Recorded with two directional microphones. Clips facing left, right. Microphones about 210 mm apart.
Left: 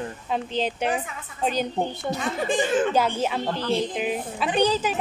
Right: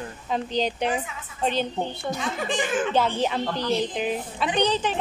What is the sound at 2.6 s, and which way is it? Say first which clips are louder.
Speech: left 4 dB; 35° left (ahead or behind).